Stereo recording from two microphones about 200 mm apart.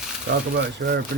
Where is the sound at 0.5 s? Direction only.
55° right (ahead or behind).